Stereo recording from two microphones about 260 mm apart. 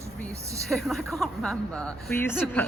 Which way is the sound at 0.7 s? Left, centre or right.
Centre.